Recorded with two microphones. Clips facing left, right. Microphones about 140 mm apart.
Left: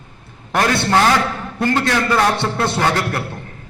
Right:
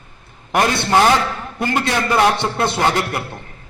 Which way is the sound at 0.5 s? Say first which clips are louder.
Even; 15° right (ahead or behind).